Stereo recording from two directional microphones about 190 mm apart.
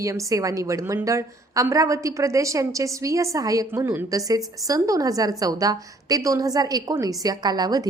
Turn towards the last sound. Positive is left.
turn(degrees=-20)  # may be behind; listen again after turning